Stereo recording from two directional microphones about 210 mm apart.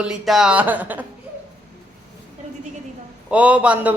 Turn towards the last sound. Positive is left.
turn(degrees=-5)  # may be behind; listen again after turning